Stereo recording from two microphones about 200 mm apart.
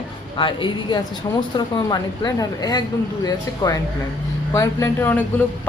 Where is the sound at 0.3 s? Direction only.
25° left (ahead or behind).